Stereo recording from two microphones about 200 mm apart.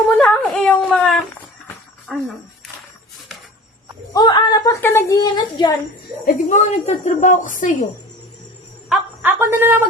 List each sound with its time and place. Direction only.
0.2 s a woman's voice: 5° left (ahead or behind)
4.1 s a woman's voice: 20° left (ahead or behind)
6.2 s a woman's voice: 35° left (ahead or behind)
8.9 s a woman's voice: 10° right (ahead or behind)